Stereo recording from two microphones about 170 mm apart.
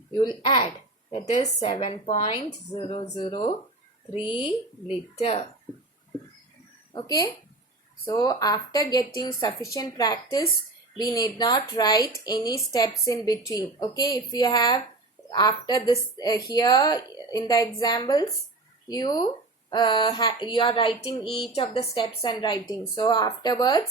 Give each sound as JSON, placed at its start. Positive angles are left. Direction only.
{"t": 0.2, "sound": "a woman's voice", "side_deg": 25}
{"t": 1.2, "sound": "a woman's voice", "side_deg": 45}
{"t": 4.1, "sound": "speech", "side_deg": -10}
{"t": 5.1, "sound": "a woman's voice", "side_deg": 35}
{"t": 6.9, "sound": "a woman's voice", "side_deg": 20}